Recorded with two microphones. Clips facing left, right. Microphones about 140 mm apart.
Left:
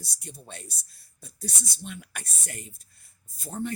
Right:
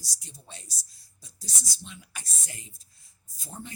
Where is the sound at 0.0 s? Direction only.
55° left (ahead or behind).